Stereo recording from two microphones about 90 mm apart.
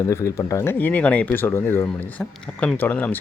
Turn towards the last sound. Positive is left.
turn(degrees=20)  # may be behind; listen again after turning